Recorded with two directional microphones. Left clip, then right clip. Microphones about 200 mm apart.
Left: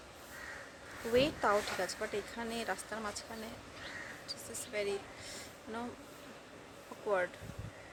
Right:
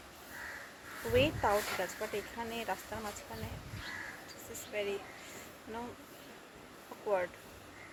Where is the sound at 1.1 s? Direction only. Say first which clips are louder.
Even; 15° left (ahead or behind).